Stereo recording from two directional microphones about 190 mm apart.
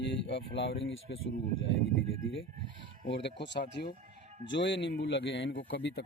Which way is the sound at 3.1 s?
70° left (ahead or behind).